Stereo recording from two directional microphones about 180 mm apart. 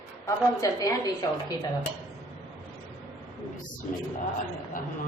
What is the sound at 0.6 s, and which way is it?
Speech, 20° left (ahead or behind).